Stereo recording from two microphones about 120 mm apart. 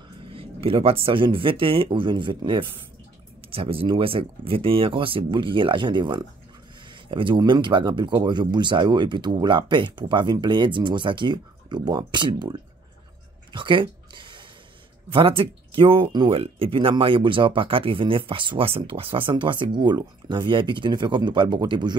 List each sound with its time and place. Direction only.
0.2 s speech: 50° right (ahead or behind)
13.5 s a sound: 45° right (ahead or behind)
15.0 s speech: 45° right (ahead or behind)